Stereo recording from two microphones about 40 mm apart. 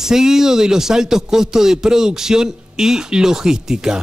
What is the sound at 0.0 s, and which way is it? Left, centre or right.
Speech, centre.